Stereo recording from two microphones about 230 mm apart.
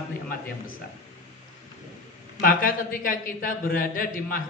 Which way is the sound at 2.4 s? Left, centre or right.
Left.